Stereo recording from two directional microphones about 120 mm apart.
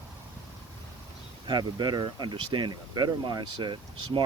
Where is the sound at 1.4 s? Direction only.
35° right (ahead or behind).